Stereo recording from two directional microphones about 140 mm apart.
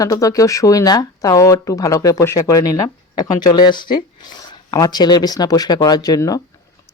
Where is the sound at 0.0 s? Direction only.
25° left (ahead or behind).